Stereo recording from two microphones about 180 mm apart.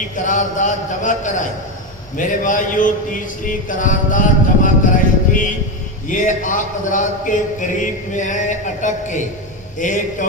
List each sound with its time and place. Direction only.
0.2 s speech: 45° left (ahead or behind)
4.6 s music: 50° left (ahead or behind)
6.1 s speech: 45° left (ahead or behind)